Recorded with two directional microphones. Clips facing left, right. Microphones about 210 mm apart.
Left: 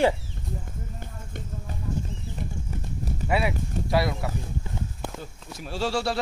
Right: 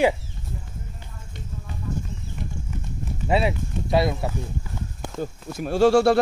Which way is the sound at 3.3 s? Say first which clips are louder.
Right 4 dB; 25° right (ahead or behind).